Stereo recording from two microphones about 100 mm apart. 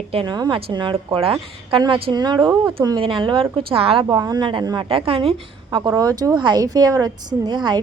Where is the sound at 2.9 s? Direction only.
55° right (ahead or behind).